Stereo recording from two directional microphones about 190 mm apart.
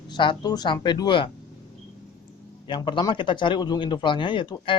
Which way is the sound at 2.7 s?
25° left (ahead or behind).